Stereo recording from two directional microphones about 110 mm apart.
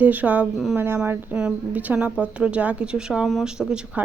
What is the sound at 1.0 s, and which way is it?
A woman's voice, 20° right (ahead or behind).